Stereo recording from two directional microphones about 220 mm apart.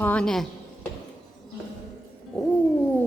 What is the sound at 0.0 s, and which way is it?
Speech, 5° left (ahead or behind).